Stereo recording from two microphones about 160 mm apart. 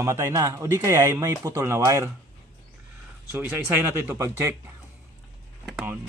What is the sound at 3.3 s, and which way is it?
Speech, 10° right (ahead or behind).